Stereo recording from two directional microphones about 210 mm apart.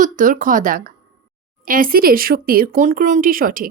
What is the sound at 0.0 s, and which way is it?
Speech, 40° right (ahead or behind).